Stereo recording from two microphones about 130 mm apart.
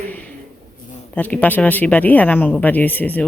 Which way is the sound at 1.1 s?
10° left (ahead or behind).